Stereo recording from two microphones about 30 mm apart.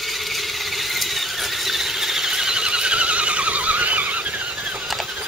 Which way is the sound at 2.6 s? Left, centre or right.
Right.